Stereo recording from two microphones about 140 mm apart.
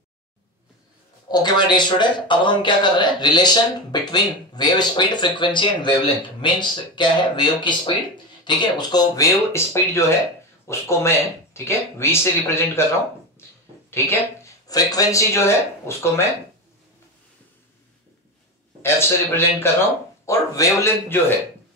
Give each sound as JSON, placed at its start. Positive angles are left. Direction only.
{"t": 1.3, "sound": "speech", "side_deg": 30}
{"t": 13.8, "sound": "speech", "side_deg": 20}
{"t": 18.8, "sound": "a man's voice", "side_deg": 20}